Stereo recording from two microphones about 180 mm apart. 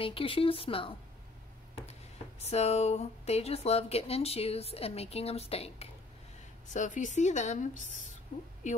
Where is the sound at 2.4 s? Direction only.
35° left (ahead or behind).